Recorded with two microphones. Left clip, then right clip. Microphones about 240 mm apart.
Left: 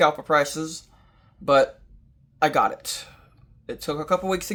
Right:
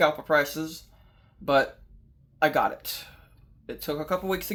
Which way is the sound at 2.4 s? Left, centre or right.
Left.